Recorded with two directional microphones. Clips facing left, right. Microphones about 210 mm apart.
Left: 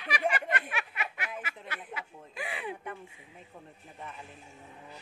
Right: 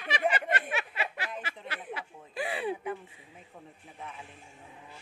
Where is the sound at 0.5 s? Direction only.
30° right (ahead or behind).